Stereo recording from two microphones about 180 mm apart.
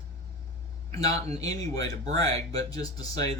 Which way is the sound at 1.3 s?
20° left (ahead or behind).